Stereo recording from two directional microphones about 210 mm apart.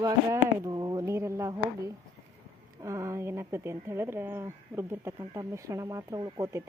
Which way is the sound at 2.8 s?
15° right (ahead or behind).